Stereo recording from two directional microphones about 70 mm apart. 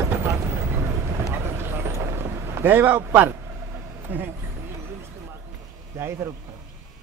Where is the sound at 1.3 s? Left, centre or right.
Right.